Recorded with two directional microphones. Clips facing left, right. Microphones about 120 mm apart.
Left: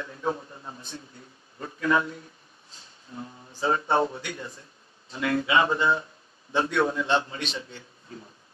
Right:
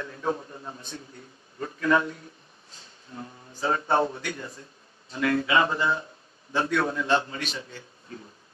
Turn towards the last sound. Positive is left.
turn(degrees=25)  # may be behind; listen again after turning